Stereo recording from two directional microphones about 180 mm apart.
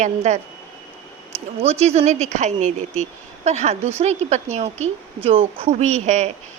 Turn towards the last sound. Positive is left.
turn(degrees=-40)  # may be behind; listen again after turning